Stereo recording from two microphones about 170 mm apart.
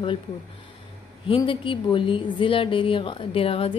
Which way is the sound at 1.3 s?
30° left (ahead or behind).